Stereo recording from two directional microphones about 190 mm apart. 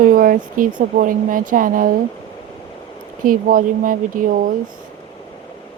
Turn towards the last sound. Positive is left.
turn(degrees=-45)  # may be behind; listen again after turning